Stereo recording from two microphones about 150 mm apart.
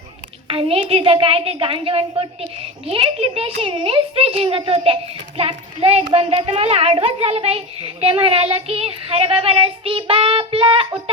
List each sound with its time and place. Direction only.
0.4 s a child's voice: 35° right (ahead or behind)